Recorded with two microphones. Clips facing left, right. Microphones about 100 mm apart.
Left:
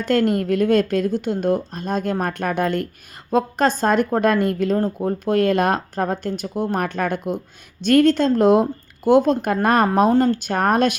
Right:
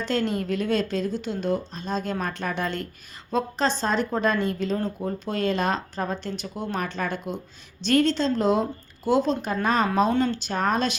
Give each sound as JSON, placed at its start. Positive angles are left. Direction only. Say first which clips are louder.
{"t": 0.0, "sound": "a woman's voice", "louder": "left 7 dB", "side_deg": 55}